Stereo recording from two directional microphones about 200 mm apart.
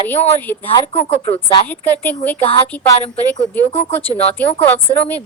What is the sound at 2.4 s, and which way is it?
Speech, 30° left (ahead or behind).